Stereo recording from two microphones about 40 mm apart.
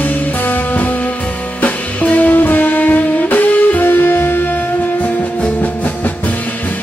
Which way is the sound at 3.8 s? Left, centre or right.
Left.